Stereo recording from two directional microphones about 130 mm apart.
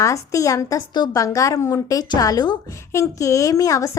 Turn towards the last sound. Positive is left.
turn(degrees=25)  # may be behind; listen again after turning